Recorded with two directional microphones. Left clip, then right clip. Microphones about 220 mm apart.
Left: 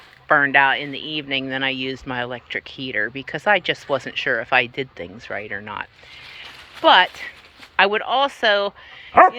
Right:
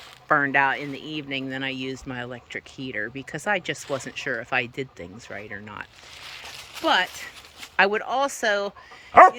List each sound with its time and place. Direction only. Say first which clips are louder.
0.3 s speech: left 5 dB; 15° right (ahead or behind)
9.1 s dog: even; 20° right (ahead or behind)